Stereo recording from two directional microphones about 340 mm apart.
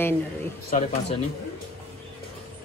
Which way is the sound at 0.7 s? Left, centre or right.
Left.